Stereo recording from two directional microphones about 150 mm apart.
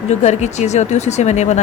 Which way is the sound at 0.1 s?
50° left (ahead or behind).